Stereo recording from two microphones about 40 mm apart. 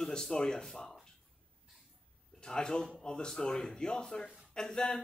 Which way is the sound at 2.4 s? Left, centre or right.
Centre.